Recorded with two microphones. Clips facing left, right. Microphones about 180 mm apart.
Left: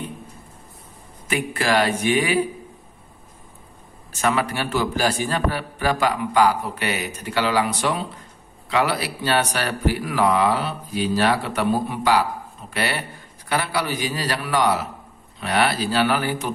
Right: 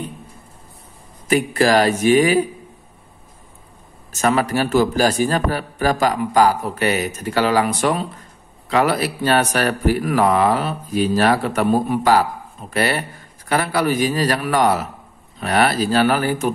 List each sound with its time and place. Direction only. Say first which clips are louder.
1.2 s speech: right 7 dB; 40° right (ahead or behind)
4.1 s a man's voice: right 4 dB; 45° right (ahead or behind)